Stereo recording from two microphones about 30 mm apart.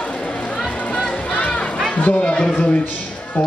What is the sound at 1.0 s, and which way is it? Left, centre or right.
Music, left.